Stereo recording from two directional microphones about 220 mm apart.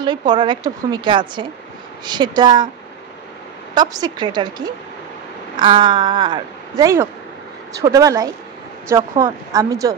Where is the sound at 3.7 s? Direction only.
15° right (ahead or behind).